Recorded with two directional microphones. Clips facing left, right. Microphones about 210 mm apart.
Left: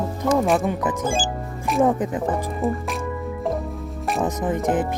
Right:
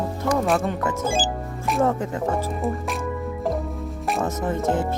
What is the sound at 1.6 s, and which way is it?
Music, centre (ahead or behind).